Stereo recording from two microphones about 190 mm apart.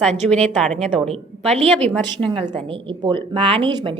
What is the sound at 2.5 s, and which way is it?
Speech, 25° right (ahead or behind).